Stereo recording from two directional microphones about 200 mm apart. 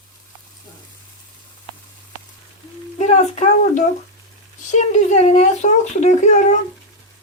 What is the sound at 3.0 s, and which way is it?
A child's voice, 35° left (ahead or behind).